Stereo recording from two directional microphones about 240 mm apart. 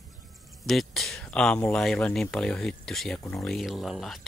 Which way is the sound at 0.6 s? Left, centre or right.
Centre.